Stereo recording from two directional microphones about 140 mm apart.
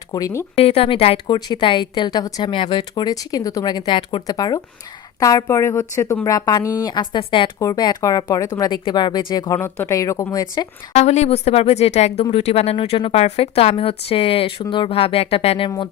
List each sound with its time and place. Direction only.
0.1 s speech: 25° left (ahead or behind)
0.5 s speech: 45° left (ahead or behind)
1.3 s speech: 30° left (ahead or behind)
9.6 s speech: 15° left (ahead or behind)
10.9 s speech: 55° left (ahead or behind)